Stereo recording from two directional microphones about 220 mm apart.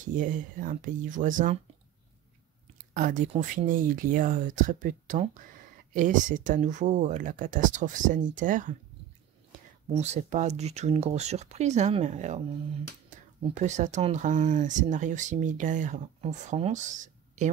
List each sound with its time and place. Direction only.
0.0 s speech: 35° right (ahead or behind)
2.9 s speech: 35° right (ahead or behind)
9.9 s speech: 30° right (ahead or behind)